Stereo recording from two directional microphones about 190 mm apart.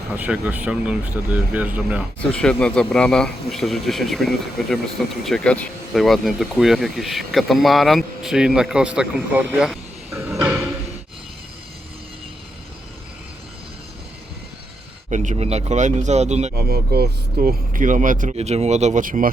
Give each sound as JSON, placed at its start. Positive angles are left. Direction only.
{"t": 0.2, "sound": "speech", "side_deg": -10}
{"t": 2.3, "sound": "speech", "side_deg": 5}
{"t": 15.1, "sound": "speech", "side_deg": -40}
{"t": 16.6, "sound": "speech", "side_deg": -55}